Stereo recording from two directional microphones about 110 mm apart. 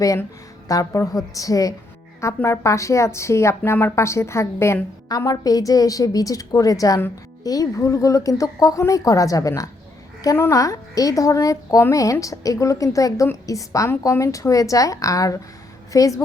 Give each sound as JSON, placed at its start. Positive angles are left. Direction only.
{"t": 0.7, "sound": "a woman's voice", "side_deg": 30}